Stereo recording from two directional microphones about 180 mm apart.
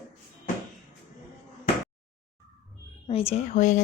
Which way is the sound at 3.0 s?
30° left (ahead or behind).